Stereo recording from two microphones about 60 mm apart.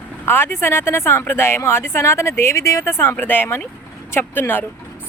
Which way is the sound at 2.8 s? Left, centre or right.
Left.